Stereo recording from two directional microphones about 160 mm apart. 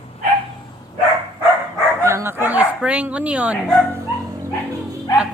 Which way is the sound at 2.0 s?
15° right (ahead or behind).